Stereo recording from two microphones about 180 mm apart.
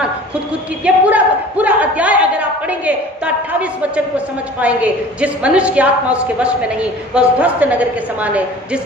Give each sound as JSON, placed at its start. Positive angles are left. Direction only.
{"t": 0.9, "sound": "a woman's voice", "side_deg": -10}